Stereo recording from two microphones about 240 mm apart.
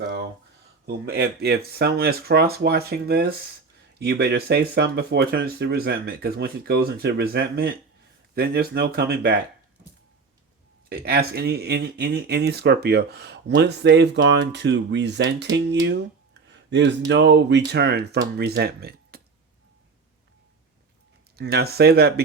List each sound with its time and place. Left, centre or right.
0.9 s speech: right
10.8 s speech: right
16.5 s a sound: right
17.1 s speech: right
21.3 s speech: right